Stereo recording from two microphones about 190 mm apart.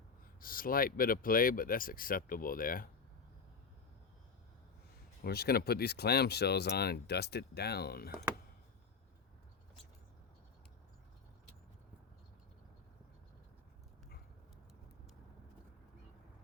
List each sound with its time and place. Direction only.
0.3 s speech: 50° left (ahead or behind)
5.2 s speech: 55° left (ahead or behind)